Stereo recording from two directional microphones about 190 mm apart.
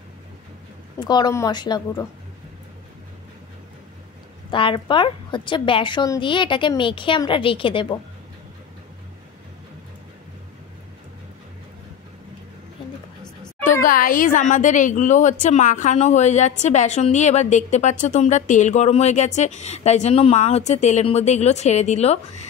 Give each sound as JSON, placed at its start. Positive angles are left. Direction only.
{"t": 0.9, "sound": "a woman's voice", "side_deg": 20}
{"t": 4.5, "sound": "a woman's voice", "side_deg": 25}
{"t": 13.8, "sound": "a woman's voice", "side_deg": 45}